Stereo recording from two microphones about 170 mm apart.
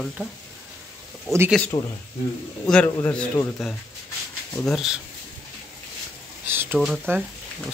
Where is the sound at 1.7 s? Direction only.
30° left (ahead or behind).